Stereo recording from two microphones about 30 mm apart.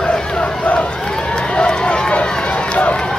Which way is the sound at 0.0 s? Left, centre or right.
Left.